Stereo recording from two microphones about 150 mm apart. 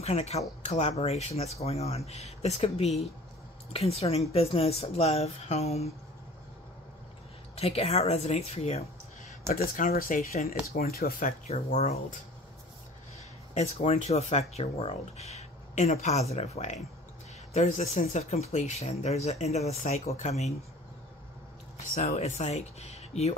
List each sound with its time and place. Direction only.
0.0 s speech: 45° left (ahead or behind)
7.5 s speech: 45° left (ahead or behind)
9.5 s speech: 65° left (ahead or behind)
10.7 s speech: 90° left; by 11.9 s 50° left (ahead or behind)
13.6 s speech: 45° left (ahead or behind)
21.7 s speech: 50° left (ahead or behind)